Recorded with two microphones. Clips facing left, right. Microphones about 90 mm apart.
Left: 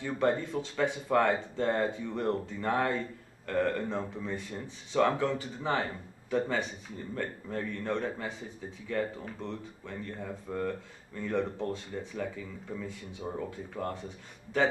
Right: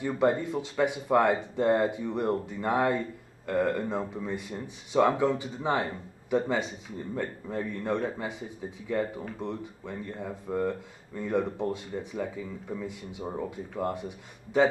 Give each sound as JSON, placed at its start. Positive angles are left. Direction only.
{"t": 0.0, "sound": "speech", "side_deg": -15}